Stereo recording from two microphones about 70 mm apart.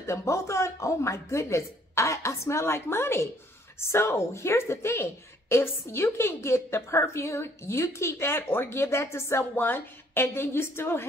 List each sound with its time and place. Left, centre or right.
0.0 s a woman's voice: left